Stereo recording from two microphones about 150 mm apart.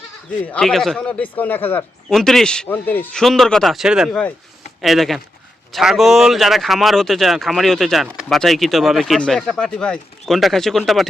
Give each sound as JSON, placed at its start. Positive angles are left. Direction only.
{"t": 0.4, "sound": "speech", "side_deg": 5}
{"t": 2.1, "sound": "speech", "side_deg": 5}
{"t": 3.2, "sound": "speech", "side_deg": 0}